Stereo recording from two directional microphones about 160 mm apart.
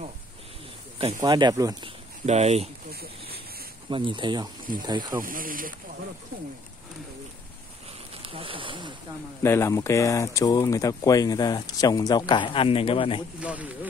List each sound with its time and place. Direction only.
0.9 s speech: 40° right (ahead or behind)
1.2 s speech: 25° right (ahead or behind)
2.2 s speech: 45° right (ahead or behind)
2.9 s speech: 75° right (ahead or behind)
3.9 s speech: 30° right (ahead or behind)
5.2 s speech: 60° right (ahead or behind)
8.2 s speech: 35° right (ahead or behind)
9.4 s speech: 15° left (ahead or behind); by 13.2 s 35° left (ahead or behind)
13.4 s speech: 10° right (ahead or behind)